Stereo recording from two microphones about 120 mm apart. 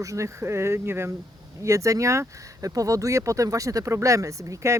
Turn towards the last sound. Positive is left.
turn(degrees=-25)  # may be behind; listen again after turning